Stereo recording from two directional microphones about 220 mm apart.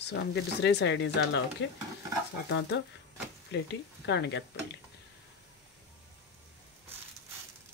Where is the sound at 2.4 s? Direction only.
55° left (ahead or behind).